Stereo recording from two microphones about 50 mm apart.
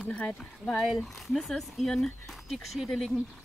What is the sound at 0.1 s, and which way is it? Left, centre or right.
Speech, left.